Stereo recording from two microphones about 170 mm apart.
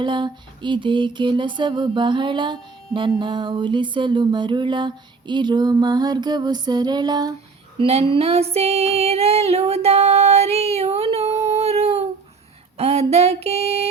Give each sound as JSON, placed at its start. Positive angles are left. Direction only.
{"t": 0.0, "sound": "a sound", "side_deg": -30}
{"t": 7.8, "sound": "music", "side_deg": -35}
{"t": 12.7, "sound": "female singing", "side_deg": -40}